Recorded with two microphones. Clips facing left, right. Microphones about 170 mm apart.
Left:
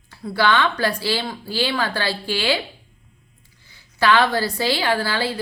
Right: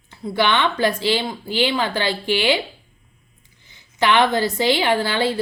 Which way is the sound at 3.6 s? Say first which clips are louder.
Left 1 dB; 20° right (ahead or behind).